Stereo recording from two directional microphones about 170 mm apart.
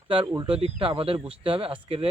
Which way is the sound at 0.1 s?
30° right (ahead or behind).